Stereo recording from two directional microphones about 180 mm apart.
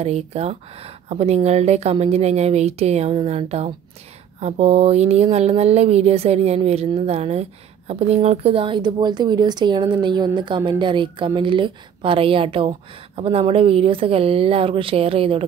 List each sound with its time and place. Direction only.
0.0 s speech: 35° right (ahead or behind)